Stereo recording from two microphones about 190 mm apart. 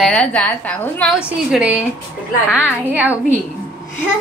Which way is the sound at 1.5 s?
10° right (ahead or behind).